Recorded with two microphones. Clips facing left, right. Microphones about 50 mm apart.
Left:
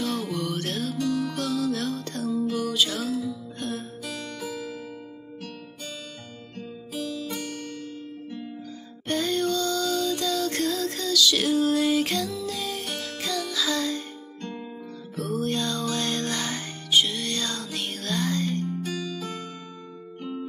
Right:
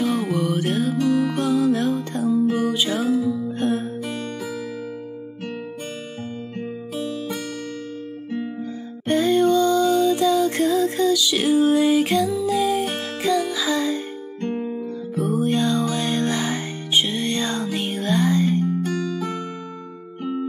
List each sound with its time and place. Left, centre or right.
0.0 s music: centre
0.9 s music: right
2.4 s music: right
7.0 s music: right
9.0 s music: centre
14.4 s music: right
15.1 s music: centre
18.8 s music: right